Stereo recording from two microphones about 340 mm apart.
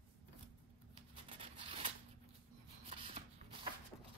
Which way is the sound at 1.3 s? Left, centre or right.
Centre.